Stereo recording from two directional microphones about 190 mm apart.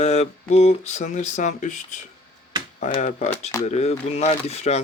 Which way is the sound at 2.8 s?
40° left (ahead or behind).